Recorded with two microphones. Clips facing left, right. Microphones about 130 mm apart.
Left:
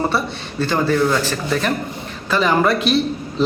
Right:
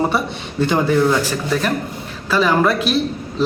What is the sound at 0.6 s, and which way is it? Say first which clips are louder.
A man's voice: right 2 dB; 15° right (ahead or behind).